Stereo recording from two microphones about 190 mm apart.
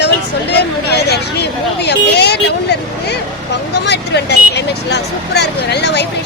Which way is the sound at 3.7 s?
65° left (ahead or behind).